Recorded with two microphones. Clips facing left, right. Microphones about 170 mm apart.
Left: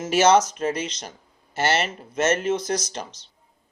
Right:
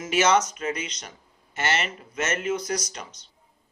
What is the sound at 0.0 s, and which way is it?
Speech, 30° left (ahead or behind).